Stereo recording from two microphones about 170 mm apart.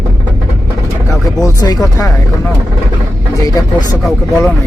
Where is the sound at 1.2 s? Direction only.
20° left (ahead or behind).